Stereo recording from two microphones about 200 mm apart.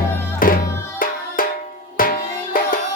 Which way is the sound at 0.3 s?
45° left (ahead or behind).